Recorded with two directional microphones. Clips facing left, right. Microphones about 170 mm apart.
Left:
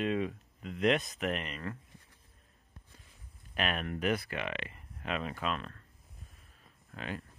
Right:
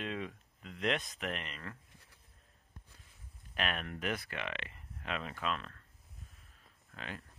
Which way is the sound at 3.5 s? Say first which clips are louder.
Left 4 dB; 10° left (ahead or behind).